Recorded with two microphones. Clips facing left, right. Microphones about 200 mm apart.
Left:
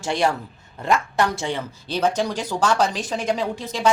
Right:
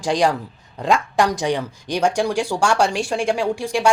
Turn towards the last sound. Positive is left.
turn(degrees=-10)  # may be behind; listen again after turning